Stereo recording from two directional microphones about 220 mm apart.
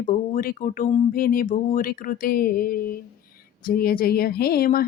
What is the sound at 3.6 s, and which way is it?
Speech, 40° left (ahead or behind).